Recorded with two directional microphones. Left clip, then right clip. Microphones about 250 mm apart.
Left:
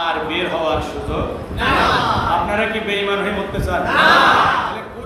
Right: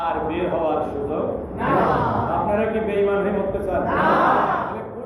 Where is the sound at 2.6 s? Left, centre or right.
Centre.